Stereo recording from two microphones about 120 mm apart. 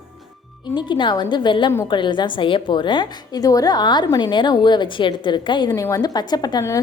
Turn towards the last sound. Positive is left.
turn(degrees=35)  # may be behind; listen again after turning